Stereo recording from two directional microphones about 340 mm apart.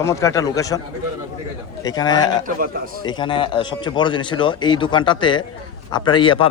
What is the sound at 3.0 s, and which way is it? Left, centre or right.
A man's voice, centre.